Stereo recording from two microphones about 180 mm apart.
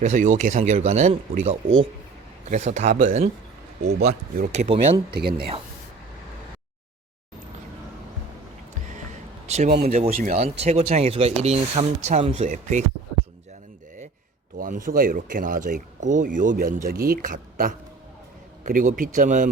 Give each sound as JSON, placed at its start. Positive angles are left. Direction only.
{"t": 0.0, "sound": "speech", "side_deg": -40}
{"t": 4.4, "sound": "speech", "side_deg": -40}
{"t": 5.1, "sound": "speech", "side_deg": -60}
{"t": 9.6, "sound": "speech", "side_deg": -60}
{"t": 9.9, "sound": "speech", "side_deg": -45}
{"t": 14.6, "sound": "speech", "side_deg": -50}